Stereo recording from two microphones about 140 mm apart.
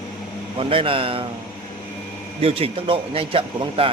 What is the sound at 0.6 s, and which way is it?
Speech, 40° right (ahead or behind).